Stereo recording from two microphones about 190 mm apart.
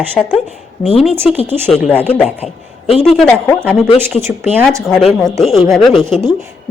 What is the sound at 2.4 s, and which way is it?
Speech, 30° left (ahead or behind).